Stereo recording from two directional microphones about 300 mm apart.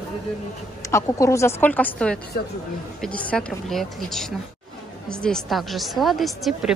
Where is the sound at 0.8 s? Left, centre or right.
Centre.